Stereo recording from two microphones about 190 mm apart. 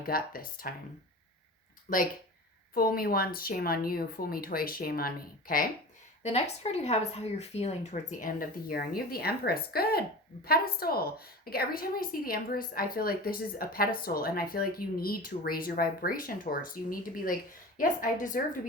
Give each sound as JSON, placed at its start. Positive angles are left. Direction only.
{"t": 0.0, "sound": "a woman's voice", "side_deg": 50}
{"t": 1.9, "sound": "a woman's voice", "side_deg": 45}
{"t": 6.2, "sound": "a woman's voice", "side_deg": 35}